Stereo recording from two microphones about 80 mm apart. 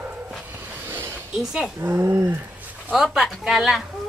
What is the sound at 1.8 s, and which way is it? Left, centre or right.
Speech, right.